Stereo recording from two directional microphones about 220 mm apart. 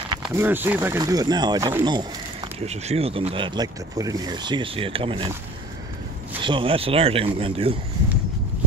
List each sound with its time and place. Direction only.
0.2 s speech: 10° right (ahead or behind)
6.4 s speech: 25° right (ahead or behind)